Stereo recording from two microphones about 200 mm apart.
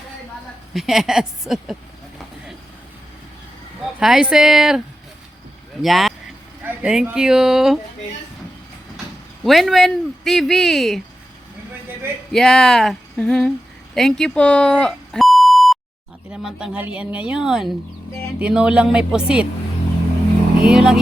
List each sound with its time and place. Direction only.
0.7 s speech: centre (ahead or behind)
4.0 s speech: centre (ahead or behind)
5.8 s speech: centre (ahead or behind)
9.4 s speech: centre (ahead or behind)
12.3 s speech: centre (ahead or behind)
20.6 s speech: 5° right (ahead or behind)